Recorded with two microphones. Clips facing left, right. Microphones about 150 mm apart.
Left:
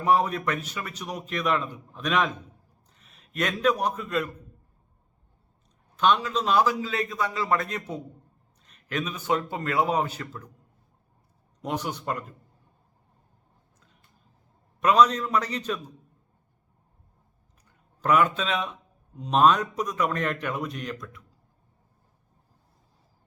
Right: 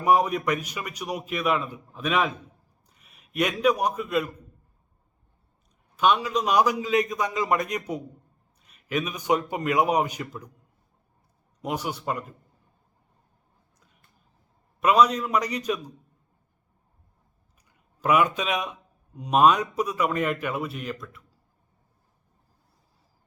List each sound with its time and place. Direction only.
0.0 s a man's voice: 10° right (ahead or behind)
6.0 s a man's voice: 10° right (ahead or behind)
11.6 s a man's voice: 10° right (ahead or behind)
14.8 s a man's voice: 10° right (ahead or behind)
17.7 s speech: 10° right (ahead or behind)